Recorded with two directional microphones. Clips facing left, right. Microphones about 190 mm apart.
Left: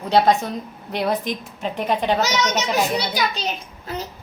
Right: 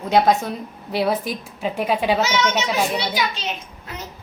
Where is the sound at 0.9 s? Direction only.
5° right (ahead or behind).